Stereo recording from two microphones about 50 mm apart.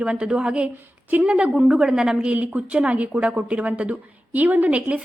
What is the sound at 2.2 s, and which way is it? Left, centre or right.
A woman's voice, right.